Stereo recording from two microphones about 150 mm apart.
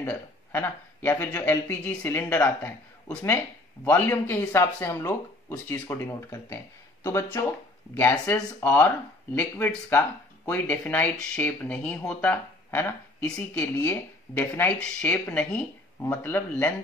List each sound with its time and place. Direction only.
0.0 s speech: 10° left (ahead or behind)